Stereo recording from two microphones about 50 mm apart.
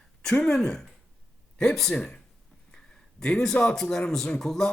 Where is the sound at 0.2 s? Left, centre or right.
Centre.